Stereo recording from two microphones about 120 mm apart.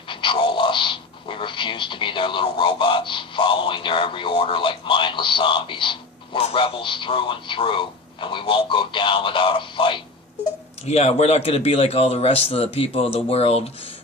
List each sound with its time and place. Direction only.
0.1 s speech: 45° left (ahead or behind)
10.8 s speech: 65° left (ahead or behind)